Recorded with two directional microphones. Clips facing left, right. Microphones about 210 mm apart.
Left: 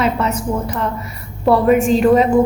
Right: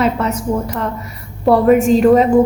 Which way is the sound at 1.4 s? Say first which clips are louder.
Right 2 dB; 45° right (ahead or behind).